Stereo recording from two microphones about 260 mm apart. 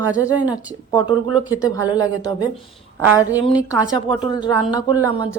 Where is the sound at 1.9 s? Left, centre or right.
Centre.